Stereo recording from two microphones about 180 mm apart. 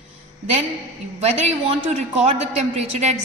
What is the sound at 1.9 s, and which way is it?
A woman's voice, 40° right (ahead or behind).